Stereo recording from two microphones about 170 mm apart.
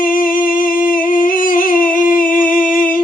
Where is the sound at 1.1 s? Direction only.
55° left (ahead or behind).